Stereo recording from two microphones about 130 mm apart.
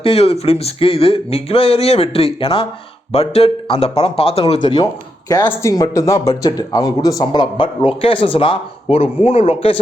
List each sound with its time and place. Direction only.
0.0 s speech: 50° left (ahead or behind)
4.6 s a man's voice: 30° left (ahead or behind); by 9.8 s 45° left (ahead or behind)